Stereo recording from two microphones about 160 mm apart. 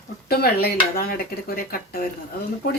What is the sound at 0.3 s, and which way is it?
Speech, 75° left (ahead or behind).